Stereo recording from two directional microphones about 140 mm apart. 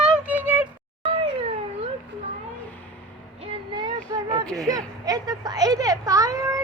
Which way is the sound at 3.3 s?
40° right (ahead or behind).